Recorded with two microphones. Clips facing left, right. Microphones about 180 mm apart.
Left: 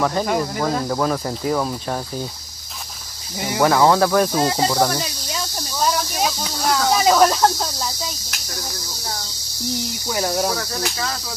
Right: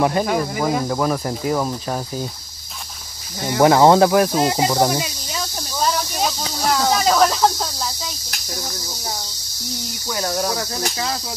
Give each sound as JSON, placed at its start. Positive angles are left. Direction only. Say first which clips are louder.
{"t": 0.2, "sound": "speech", "louder": "right 1 dB", "side_deg": -5}
{"t": 3.5, "sound": "speech", "louder": "right 3 dB", "side_deg": -20}
{"t": 5.3, "sound": "snake", "louder": "left 1 dB", "side_deg": 0}
{"t": 6.9, "sound": "a sound", "louder": "left 3 dB", "side_deg": 5}
{"t": 10.0, "sound": "speech", "louder": "left 1 dB", "side_deg": 15}